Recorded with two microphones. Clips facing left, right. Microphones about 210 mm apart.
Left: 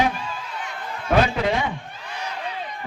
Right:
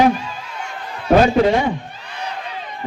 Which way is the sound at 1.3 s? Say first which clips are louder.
Right 8 dB; 40° right (ahead or behind).